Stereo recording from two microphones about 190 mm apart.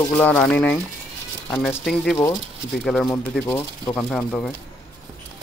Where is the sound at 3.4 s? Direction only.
15° left (ahead or behind).